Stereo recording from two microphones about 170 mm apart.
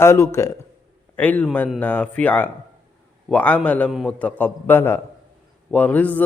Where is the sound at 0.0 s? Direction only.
15° left (ahead or behind).